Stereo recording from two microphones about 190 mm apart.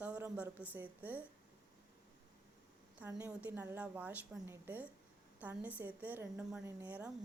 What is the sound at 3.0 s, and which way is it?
A woman's voice, 15° right (ahead or behind).